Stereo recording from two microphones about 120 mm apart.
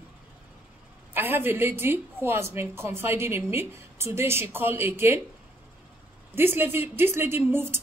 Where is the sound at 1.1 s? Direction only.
20° right (ahead or behind).